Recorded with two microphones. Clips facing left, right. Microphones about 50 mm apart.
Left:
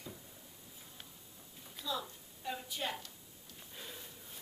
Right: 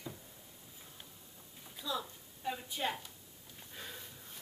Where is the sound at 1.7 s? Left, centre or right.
Centre.